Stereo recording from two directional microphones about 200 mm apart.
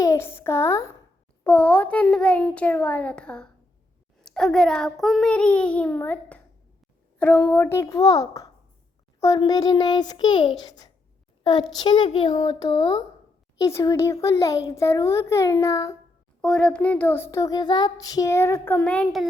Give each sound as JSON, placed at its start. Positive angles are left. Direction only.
{"t": 0.0, "sound": "a woman's voice", "side_deg": 15}
{"t": 1.5, "sound": "child singing", "side_deg": 10}
{"t": 4.2, "sound": "a child's voice", "side_deg": 5}
{"t": 7.2, "sound": "child singing", "side_deg": 10}
{"t": 9.2, "sound": "a child's voice", "side_deg": 20}
{"t": 11.8, "sound": "a child's voice", "side_deg": 25}
{"t": 13.6, "sound": "child singing", "side_deg": 15}
{"t": 16.4, "sound": "child singing", "side_deg": 5}